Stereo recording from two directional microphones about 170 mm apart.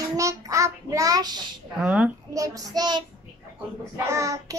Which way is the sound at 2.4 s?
20° right (ahead or behind).